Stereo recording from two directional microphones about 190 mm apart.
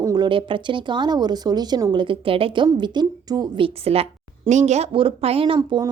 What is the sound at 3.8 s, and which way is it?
A woman's voice, 30° right (ahead or behind).